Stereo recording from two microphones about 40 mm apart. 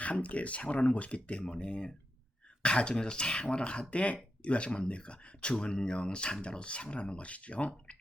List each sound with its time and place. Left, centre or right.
0.0 s speech: left